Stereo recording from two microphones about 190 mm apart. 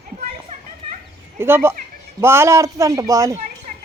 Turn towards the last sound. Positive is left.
turn(degrees=-45)  # may be behind; listen again after turning